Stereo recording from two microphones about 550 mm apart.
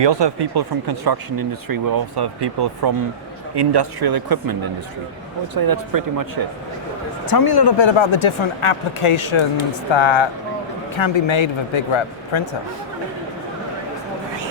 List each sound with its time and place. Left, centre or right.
0.0 s speech: right
5.5 s speech: right
7.3 s speech: left